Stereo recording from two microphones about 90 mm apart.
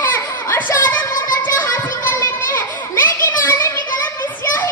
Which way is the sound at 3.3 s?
30° left (ahead or behind).